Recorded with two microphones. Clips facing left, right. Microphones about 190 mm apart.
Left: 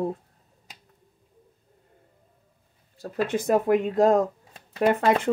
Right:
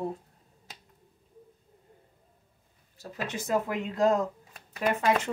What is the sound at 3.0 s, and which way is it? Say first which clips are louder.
Speech: left 9 dB; 55° left (ahead or behind).